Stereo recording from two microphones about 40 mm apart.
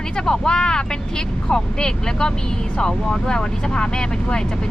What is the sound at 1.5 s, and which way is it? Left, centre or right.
Speech, centre.